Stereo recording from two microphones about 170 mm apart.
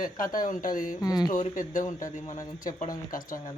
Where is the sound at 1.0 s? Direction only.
20° left (ahead or behind).